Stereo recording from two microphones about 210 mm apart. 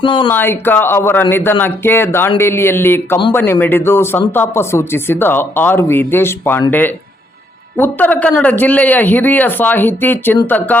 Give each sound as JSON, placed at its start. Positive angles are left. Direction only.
{"t": 0.0, "sound": "speech", "side_deg": 25}
{"t": 0.3, "sound": "speech", "side_deg": 10}